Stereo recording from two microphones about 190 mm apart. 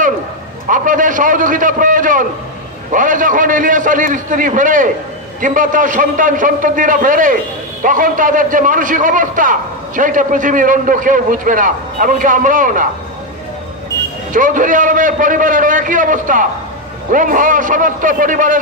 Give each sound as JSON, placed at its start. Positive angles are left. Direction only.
{"t": 0.7, "sound": "a man's voice", "side_deg": -45}
{"t": 14.3, "sound": "a man's voice", "side_deg": -45}